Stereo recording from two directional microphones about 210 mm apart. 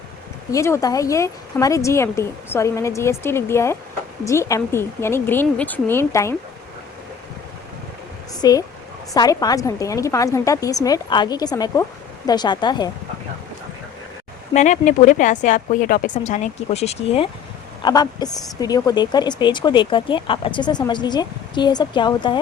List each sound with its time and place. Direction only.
0.5 s speech: 15° left (ahead or behind)
8.4 s speech: 20° left (ahead or behind)
14.5 s speech: 35° left (ahead or behind)
17.8 s a woman's voice: 20° left (ahead or behind)